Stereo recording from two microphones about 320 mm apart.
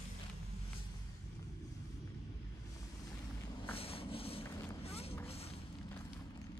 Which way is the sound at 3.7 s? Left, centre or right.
Centre.